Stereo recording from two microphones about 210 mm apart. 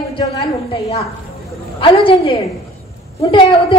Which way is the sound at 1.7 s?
25° left (ahead or behind).